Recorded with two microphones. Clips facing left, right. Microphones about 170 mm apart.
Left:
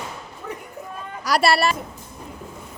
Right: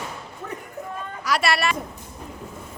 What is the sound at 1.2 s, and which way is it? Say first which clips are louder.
Speech: left 4 dB; 35° left (ahead or behind).